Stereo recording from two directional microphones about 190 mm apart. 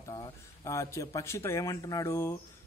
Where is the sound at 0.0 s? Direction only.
20° left (ahead or behind).